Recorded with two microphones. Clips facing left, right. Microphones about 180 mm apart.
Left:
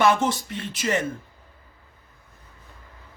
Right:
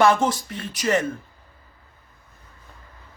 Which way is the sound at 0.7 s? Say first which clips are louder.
Right 3 dB; 45° right (ahead or behind).